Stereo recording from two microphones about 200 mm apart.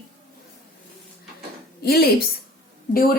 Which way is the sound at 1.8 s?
50° left (ahead or behind).